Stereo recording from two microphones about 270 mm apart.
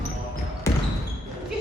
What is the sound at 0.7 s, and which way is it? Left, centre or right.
Basketball bounce, centre.